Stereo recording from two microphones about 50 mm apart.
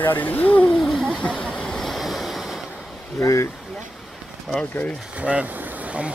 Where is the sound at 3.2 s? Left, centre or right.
Left.